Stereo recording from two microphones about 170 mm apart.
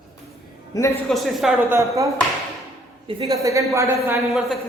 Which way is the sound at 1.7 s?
20° right (ahead or behind).